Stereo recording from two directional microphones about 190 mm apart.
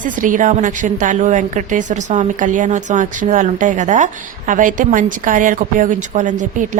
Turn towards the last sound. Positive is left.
turn(degrees=-40)  # may be behind; listen again after turning